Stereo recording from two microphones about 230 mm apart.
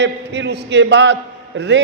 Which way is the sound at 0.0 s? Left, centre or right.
Right.